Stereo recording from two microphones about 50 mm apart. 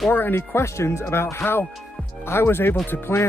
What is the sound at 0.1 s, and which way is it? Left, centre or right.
A man's voice, left.